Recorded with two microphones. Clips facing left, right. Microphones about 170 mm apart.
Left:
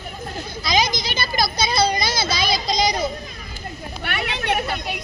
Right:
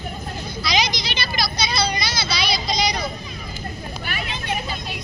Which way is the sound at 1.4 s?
50° left (ahead or behind).